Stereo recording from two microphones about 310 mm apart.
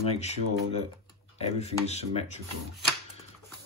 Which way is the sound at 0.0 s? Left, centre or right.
Left.